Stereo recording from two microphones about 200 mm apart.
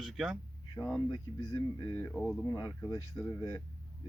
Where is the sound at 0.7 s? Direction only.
15° left (ahead or behind).